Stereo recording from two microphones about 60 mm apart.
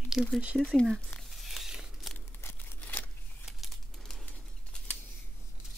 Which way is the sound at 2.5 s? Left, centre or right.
Left.